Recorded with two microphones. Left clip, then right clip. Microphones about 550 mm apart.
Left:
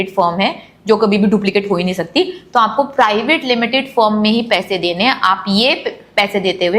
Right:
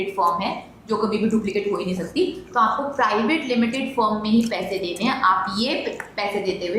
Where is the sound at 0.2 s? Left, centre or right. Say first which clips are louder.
Left 7 dB; left.